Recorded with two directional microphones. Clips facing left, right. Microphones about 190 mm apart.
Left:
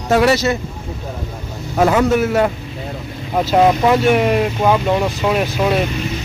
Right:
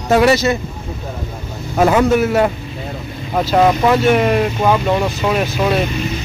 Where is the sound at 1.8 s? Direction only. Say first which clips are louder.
Right 1 dB; 10° right (ahead or behind).